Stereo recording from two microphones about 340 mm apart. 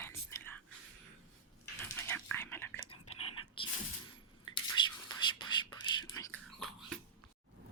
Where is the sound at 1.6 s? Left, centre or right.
Centre.